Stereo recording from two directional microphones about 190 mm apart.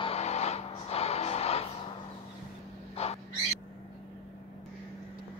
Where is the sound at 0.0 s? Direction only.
35° left (ahead or behind).